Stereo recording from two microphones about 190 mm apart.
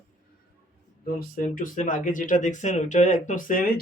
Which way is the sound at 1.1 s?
50° left (ahead or behind).